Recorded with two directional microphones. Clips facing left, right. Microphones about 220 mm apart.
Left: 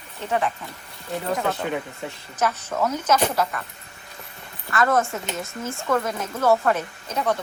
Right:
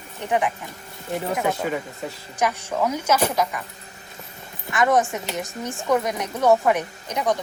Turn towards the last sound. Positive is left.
turn(degrees=-15)  # may be behind; listen again after turning